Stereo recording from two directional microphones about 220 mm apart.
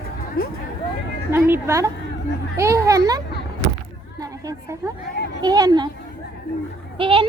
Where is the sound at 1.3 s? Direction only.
10° right (ahead or behind).